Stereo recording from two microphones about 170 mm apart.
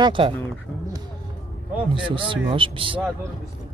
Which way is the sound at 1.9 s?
30° right (ahead or behind).